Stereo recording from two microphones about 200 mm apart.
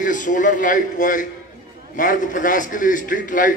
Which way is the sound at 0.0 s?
40° left (ahead or behind).